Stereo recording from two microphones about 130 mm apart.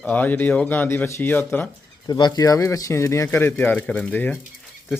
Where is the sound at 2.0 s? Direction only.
30° left (ahead or behind); by 4.3 s 10° left (ahead or behind).